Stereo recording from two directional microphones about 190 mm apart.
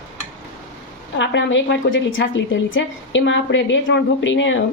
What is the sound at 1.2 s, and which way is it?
A woman's voice, 70° left (ahead or behind).